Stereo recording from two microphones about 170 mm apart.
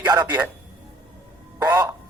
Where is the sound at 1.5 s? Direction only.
20° right (ahead or behind).